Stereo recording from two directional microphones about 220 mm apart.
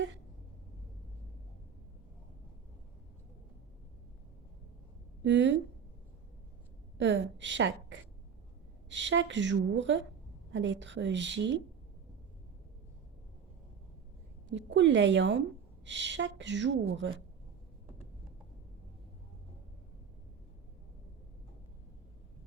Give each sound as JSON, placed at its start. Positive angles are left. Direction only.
{"t": 5.2, "sound": "a woman's voice", "side_deg": -55}
{"t": 7.0, "sound": "a woman's voice", "side_deg": -55}
{"t": 14.5, "sound": "a woman's voice", "side_deg": -55}